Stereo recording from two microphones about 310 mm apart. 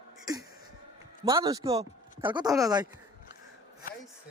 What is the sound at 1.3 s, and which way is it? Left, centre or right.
A man's voice, centre.